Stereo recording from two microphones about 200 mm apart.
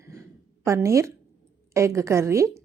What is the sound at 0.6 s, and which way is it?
Speech, 15° right (ahead or behind).